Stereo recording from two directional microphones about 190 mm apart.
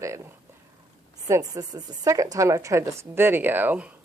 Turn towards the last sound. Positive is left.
turn(degrees=-10)  # may be behind; listen again after turning